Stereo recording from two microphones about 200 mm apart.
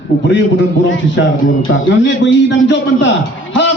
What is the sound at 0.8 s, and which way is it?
A man's voice, 70° left (ahead or behind).